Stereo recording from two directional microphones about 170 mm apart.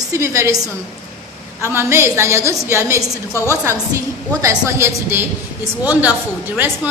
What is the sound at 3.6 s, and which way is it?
A woman's voice, 20° right (ahead or behind).